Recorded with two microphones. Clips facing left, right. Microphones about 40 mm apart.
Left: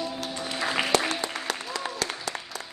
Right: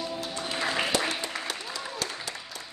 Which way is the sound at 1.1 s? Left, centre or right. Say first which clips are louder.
Left 2 dB; left.